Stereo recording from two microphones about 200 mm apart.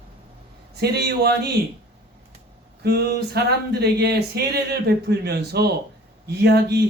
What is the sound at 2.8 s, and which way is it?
A man's voice, 50° right (ahead or behind).